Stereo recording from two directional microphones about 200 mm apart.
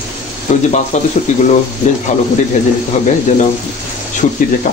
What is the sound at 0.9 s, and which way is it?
Speech, 35° left (ahead or behind).